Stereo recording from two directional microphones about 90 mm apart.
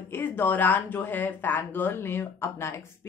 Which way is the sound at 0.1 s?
20° left (ahead or behind).